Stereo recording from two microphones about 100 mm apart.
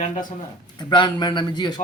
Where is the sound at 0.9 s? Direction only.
50° left (ahead or behind).